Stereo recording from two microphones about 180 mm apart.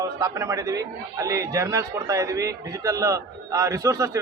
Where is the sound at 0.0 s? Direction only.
20° right (ahead or behind).